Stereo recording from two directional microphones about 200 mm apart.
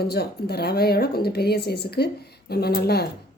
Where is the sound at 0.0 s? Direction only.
50° left (ahead or behind).